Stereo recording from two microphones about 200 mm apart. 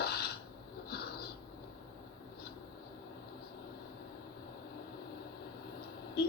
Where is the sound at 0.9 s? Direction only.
55° left (ahead or behind).